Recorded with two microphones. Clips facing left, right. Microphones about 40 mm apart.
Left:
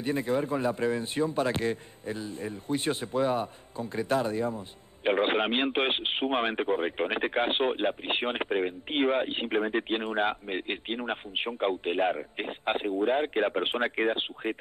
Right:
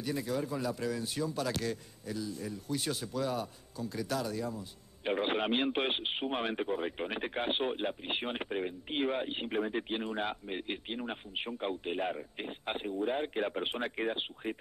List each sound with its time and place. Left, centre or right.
0.0 s speech: left